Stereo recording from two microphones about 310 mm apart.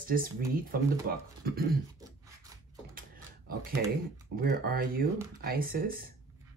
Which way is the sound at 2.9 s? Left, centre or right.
Right.